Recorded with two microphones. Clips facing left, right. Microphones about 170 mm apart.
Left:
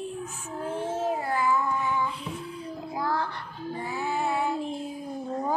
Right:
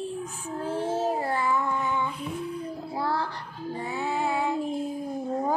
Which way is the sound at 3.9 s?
20° right (ahead or behind).